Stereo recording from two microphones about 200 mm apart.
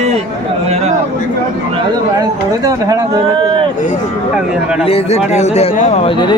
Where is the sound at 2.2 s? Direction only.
15° right (ahead or behind).